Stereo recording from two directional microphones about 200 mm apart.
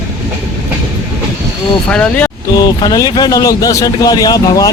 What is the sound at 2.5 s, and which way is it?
Speech, 20° left (ahead or behind).